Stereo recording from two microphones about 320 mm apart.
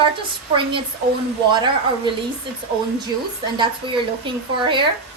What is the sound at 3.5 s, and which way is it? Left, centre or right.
Speech, centre.